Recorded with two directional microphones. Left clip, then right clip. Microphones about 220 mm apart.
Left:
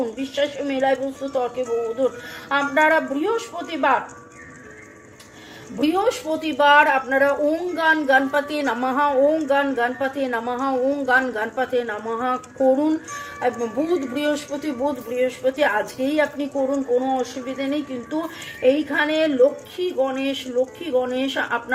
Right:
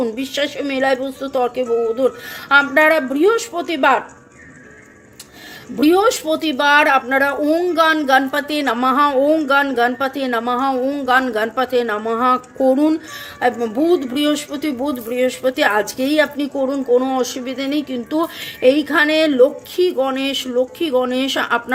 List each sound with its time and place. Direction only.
0.0 s speech: 45° right (ahead or behind)
5.8 s a woman's voice: 45° right (ahead or behind)
13.6 s a woman's voice: 35° right (ahead or behind)
15.1 s speech: 45° right (ahead or behind)